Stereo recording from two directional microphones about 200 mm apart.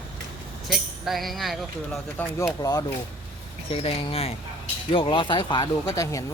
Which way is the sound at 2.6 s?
20° left (ahead or behind).